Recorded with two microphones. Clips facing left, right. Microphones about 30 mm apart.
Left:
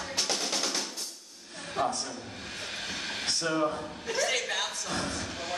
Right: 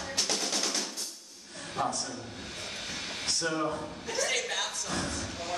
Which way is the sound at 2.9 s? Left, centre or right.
Left.